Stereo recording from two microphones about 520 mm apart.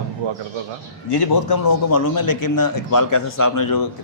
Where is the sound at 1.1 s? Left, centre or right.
Left.